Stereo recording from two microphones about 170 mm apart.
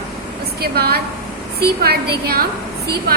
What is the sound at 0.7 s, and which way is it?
A woman's voice, 65° right (ahead or behind).